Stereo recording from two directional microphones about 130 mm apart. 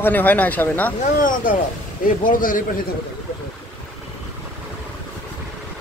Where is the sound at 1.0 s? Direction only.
90° left.